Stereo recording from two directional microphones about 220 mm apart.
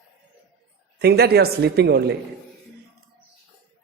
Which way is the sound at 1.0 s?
45° right (ahead or behind).